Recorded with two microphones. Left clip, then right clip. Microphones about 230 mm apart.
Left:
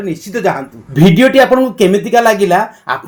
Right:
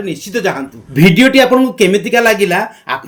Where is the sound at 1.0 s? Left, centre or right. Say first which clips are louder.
Left 1 dB; centre.